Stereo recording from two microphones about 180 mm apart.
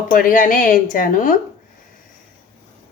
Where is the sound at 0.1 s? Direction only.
50° left (ahead or behind).